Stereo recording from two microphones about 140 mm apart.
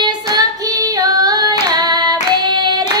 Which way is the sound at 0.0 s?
30° right (ahead or behind).